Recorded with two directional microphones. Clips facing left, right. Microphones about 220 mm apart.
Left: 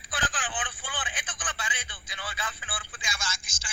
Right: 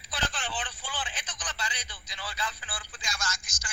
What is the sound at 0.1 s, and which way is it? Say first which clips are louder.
Telephone: left 1 dB; 50° left (ahead or behind).